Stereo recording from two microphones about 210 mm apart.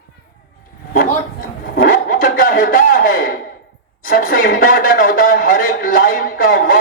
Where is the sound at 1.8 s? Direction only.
40° left (ahead or behind).